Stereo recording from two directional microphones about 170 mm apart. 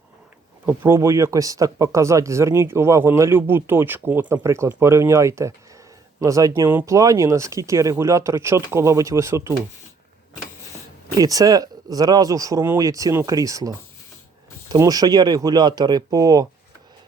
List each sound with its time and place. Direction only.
0.6 s speech: 10° right (ahead or behind)
11.2 s speech: 20° right (ahead or behind)